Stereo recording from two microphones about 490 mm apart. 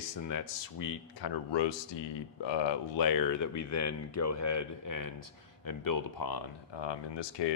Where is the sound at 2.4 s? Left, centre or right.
Left.